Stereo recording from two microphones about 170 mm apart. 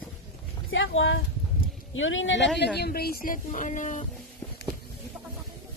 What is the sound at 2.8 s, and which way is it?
Speech, 65° left (ahead or behind).